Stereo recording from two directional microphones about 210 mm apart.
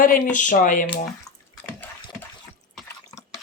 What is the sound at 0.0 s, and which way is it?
Speech, 40° left (ahead or behind).